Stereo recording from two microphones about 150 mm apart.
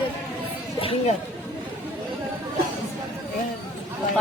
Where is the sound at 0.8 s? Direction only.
40° left (ahead or behind).